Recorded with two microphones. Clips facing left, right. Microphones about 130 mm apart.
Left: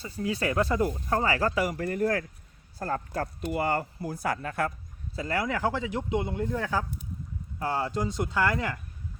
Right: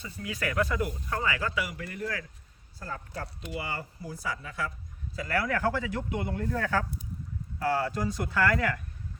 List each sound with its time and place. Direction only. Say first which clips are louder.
0.0 s speech: left 5 dB; 30° left (ahead or behind); by 4.7 s 55° left (ahead or behind)
5.1 s speech: even; 25° left (ahead or behind)